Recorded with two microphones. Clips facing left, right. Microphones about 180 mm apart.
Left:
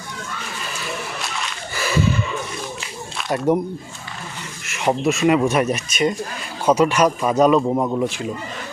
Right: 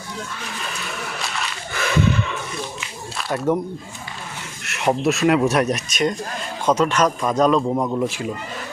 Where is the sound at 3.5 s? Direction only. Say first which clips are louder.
Left 2 dB; 15° left (ahead or behind).